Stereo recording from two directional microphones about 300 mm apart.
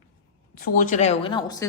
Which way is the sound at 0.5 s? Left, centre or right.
Left.